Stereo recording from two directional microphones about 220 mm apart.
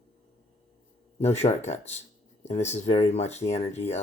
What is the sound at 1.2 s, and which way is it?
Speech, 30° left (ahead or behind).